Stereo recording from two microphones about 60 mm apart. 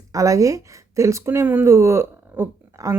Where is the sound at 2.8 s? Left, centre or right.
Right.